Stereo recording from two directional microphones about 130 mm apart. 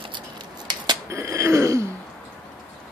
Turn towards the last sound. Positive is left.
turn(degrees=-20)  # may be behind; listen again after turning